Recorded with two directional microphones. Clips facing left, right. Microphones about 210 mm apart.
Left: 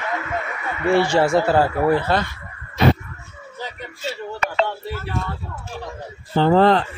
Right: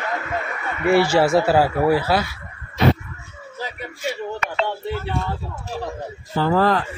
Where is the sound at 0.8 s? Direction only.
5° right (ahead or behind).